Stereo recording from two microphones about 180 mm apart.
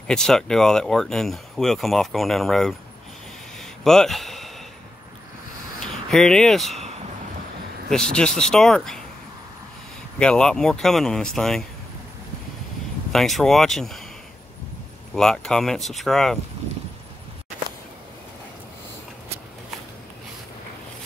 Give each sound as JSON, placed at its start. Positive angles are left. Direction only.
{"t": 0.1, "sound": "speech", "side_deg": 5}
{"t": 3.5, "sound": "a sound", "side_deg": 0}
{"t": 6.0, "sound": "speech", "side_deg": 5}
{"t": 7.9, "sound": "speech", "side_deg": 5}
{"t": 10.1, "sound": "speech", "side_deg": 5}
{"t": 13.1, "sound": "speech", "side_deg": 0}
{"t": 15.1, "sound": "speech", "side_deg": 5}